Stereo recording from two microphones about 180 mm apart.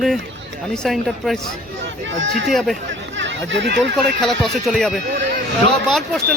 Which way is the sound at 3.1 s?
90° right.